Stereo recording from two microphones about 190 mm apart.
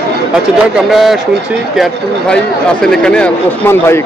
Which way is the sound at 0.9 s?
Centre (ahead or behind).